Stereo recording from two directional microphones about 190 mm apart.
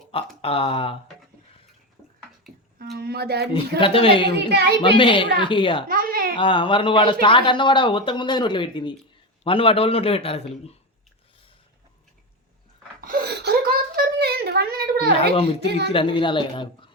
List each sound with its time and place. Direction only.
0.4 s a man's voice: 30° left (ahead or behind)
2.7 s speech: 55° right (ahead or behind)
3.5 s a man's voice: 25° left (ahead or behind)
4.4 s speech: 60° right (ahead or behind)
4.8 s a man's voice: 25° left (ahead or behind)
5.9 s a sound: 50° right (ahead or behind)
6.3 s a man's voice: 25° left (ahead or behind)
13.0 s whimper: 50° right (ahead or behind)
15.9 s a man's voice: 25° left (ahead or behind)